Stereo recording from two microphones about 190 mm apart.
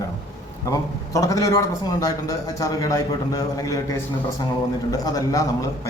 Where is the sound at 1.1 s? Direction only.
15° left (ahead or behind).